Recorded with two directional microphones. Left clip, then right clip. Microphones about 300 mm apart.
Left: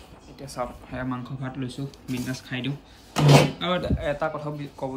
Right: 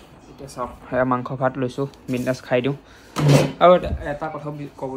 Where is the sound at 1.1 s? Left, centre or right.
Centre.